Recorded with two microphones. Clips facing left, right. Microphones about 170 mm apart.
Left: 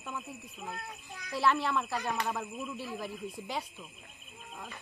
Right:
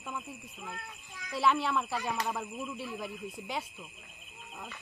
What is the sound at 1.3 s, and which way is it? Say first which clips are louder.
Speech: even; centre (ahead or behind).